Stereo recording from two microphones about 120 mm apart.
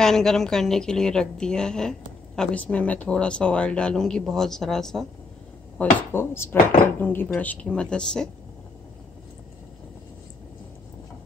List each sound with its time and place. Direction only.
0.0 s a woman's voice: 5° left (ahead or behind)
5.8 s speech: 15° left (ahead or behind)